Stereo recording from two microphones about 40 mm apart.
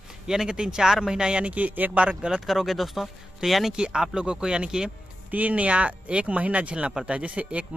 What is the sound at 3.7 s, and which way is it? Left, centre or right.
Speech, centre.